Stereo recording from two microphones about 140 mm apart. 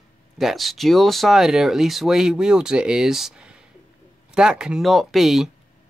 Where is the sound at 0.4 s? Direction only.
Centre (ahead or behind).